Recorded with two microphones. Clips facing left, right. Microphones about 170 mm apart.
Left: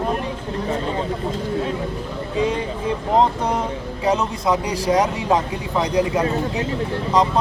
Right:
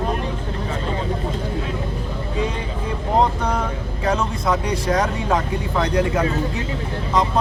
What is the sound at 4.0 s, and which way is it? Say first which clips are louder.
Speech: left 2 dB; 15° left (ahead or behind).